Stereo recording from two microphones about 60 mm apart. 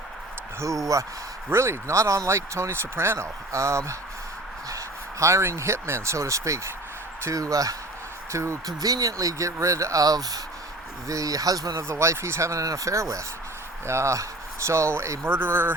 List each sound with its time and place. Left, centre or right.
0.6 s speech: right
1.5 s speech: right
5.2 s speech: right
7.3 s speech: right
8.3 s speech: right
11.1 s speech: right
11.9 s speech: right
15.3 s speech: right